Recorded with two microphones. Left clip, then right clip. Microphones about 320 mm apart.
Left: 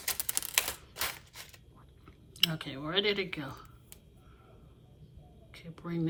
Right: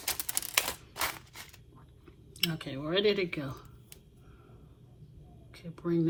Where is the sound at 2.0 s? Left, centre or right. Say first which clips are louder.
Left 3 dB; centre.